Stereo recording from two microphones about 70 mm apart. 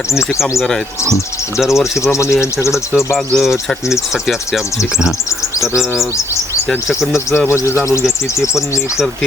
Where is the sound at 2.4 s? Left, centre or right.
Left.